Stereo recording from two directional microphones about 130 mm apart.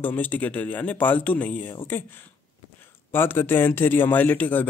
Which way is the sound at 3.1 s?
15° left (ahead or behind).